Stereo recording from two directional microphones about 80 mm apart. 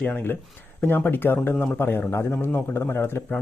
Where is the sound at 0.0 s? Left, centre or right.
Left.